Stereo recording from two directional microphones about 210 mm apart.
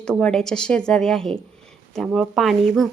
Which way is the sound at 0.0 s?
5° left (ahead or behind).